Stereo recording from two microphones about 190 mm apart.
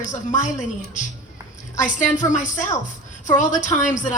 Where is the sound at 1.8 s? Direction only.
40° left (ahead or behind).